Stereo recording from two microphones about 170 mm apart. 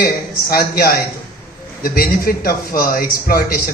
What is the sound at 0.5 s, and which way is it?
A man's voice, 60° left (ahead or behind).